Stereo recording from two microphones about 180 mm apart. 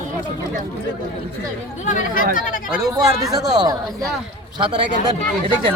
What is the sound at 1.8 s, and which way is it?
Speech, 45° left (ahead or behind).